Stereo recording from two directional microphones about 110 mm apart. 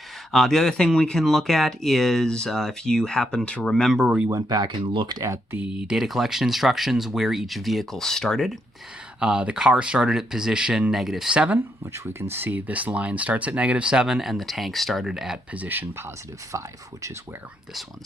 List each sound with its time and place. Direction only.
0.3 s speech: 5° left (ahead or behind)
4.3 s speech: 35° right (ahead or behind)
5.2 s speech: 25° right (ahead or behind)
5.5 s speech: 10° right (ahead or behind)
9.2 s speech: 10° right (ahead or behind)
16.5 s speech: 30° right (ahead or behind)